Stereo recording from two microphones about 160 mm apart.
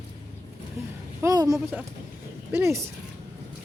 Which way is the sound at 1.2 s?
20° right (ahead or behind).